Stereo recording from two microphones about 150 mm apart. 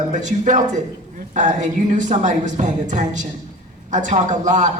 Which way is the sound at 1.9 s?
55° right (ahead or behind).